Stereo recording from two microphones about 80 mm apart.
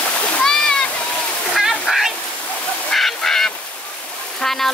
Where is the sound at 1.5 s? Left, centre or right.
Centre.